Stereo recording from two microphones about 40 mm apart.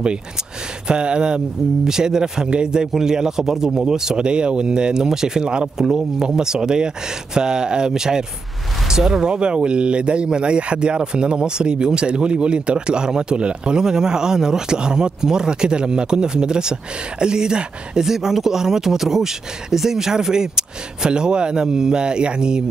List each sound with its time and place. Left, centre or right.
0.8 s speech: right
5.9 s speech: centre
9.3 s speech: right